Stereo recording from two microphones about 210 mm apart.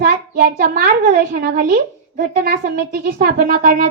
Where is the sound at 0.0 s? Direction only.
45° right (ahead or behind).